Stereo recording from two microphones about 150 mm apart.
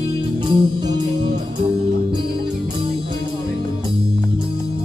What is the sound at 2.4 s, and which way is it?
Music, 30° right (ahead or behind).